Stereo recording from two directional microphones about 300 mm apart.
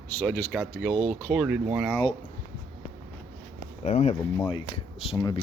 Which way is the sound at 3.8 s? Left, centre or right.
Left.